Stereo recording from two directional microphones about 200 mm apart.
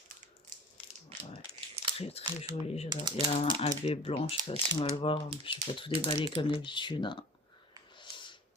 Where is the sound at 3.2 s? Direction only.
30° left (ahead or behind).